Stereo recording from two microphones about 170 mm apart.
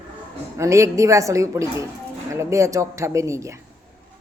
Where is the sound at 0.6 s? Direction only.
15° right (ahead or behind).